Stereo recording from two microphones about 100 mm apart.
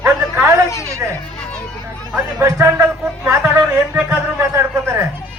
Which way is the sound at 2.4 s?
25° right (ahead or behind).